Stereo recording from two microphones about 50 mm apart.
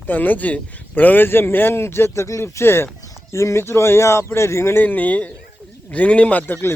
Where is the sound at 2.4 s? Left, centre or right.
Left.